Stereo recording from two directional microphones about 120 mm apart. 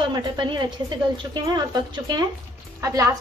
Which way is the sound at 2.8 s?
30° right (ahead or behind).